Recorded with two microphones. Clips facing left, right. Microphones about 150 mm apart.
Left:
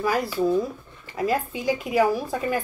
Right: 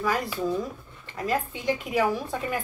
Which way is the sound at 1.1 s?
5° left (ahead or behind).